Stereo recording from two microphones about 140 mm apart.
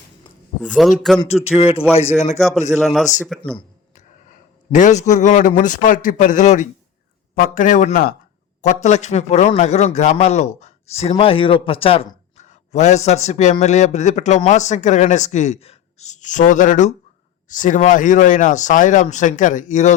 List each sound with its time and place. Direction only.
0.7 s a man's voice: centre (ahead or behind)
1.5 s a man's voice: 45° left (ahead or behind)
2.1 s a man's voice: 55° left (ahead or behind)
2.8 s a man's voice: centre (ahead or behind)
3.9 s a man's voice: 65° left (ahead or behind)
7.3 s a man's voice: 85° left
8.6 s a man's voice: 55° left (ahead or behind); by 12.5 s 40° left (ahead or behind)
12.5 s a man's voice: 55° left (ahead or behind)